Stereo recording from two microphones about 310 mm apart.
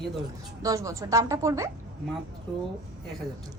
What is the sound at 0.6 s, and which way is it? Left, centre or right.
A woman's voice, centre.